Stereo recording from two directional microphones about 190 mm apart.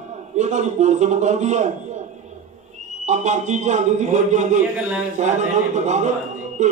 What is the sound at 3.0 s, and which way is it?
A man's voice, 40° right (ahead or behind).